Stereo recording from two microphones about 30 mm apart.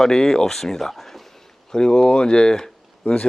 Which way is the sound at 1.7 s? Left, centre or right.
Left.